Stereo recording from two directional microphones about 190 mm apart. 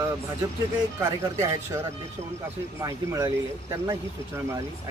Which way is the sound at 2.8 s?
15° right (ahead or behind).